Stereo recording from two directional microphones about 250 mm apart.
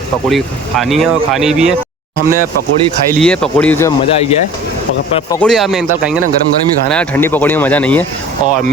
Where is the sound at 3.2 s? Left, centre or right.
Centre.